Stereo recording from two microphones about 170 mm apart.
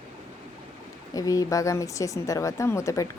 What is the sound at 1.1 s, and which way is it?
Speech, 20° left (ahead or behind).